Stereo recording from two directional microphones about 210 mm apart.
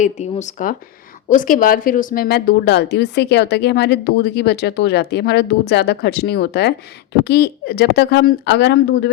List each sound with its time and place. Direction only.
0.0 s a woman's voice: 35° left (ahead or behind); by 9.0 s 55° left (ahead or behind)